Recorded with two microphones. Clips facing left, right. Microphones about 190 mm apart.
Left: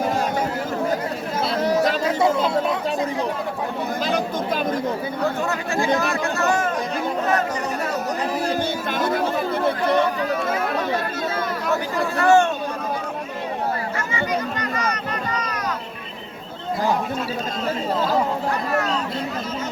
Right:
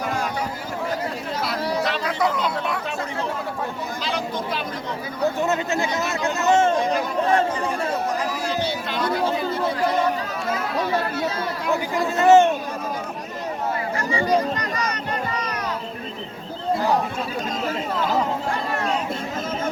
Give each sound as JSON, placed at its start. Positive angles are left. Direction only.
{"t": 1.6, "sound": "chatter", "side_deg": 45}
{"t": 2.0, "sound": "chatter", "side_deg": 25}
{"t": 4.0, "sound": "speech", "side_deg": 45}
{"t": 5.2, "sound": "speech", "side_deg": -20}
{"t": 6.0, "sound": "chatter", "side_deg": -20}
{"t": 8.4, "sound": "chatter", "side_deg": 50}
{"t": 11.7, "sound": "speech", "side_deg": -20}
{"t": 14.1, "sound": "a sound", "side_deg": -35}